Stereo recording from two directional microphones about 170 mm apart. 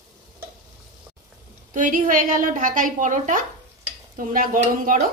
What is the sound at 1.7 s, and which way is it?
Speech, 55° right (ahead or behind).